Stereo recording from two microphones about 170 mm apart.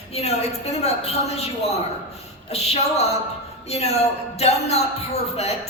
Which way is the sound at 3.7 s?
40° left (ahead or behind).